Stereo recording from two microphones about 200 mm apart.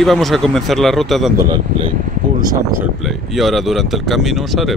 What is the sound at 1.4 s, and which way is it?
Speech, 20° right (ahead or behind).